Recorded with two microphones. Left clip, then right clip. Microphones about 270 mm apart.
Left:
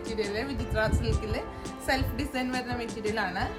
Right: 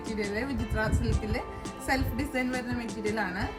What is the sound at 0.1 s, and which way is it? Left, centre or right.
Speech, centre.